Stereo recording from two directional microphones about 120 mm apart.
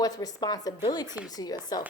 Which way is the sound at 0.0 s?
30° left (ahead or behind).